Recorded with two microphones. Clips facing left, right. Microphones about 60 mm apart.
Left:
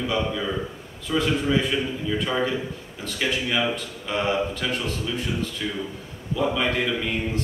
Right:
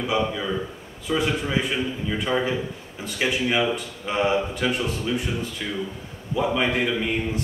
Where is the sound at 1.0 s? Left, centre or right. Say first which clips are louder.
Left 1 dB; centre.